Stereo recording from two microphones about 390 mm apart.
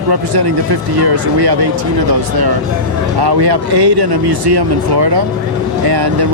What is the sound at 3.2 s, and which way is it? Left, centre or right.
Speech, right.